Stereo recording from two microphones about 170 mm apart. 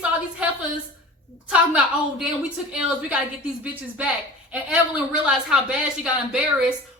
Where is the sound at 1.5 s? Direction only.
5° right (ahead or behind).